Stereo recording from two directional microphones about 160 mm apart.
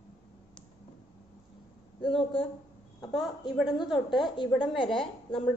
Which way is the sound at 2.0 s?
35° left (ahead or behind).